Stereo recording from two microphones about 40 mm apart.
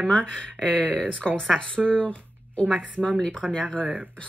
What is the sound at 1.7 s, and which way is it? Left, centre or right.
Speech, right.